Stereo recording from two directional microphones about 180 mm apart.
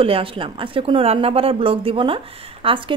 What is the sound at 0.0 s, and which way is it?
Speech, 30° right (ahead or behind).